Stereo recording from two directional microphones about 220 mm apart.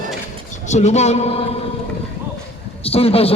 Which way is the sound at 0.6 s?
30° left (ahead or behind).